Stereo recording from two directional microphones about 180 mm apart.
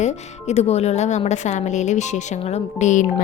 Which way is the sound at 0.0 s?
40° left (ahead or behind).